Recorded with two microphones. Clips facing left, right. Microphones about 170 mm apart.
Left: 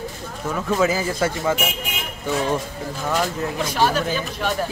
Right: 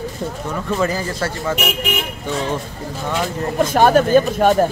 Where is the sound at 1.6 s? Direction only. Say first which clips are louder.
Right 5 dB; 75° right (ahead or behind).